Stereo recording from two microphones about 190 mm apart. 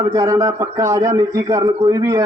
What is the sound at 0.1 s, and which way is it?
A man's voice, 15° right (ahead or behind).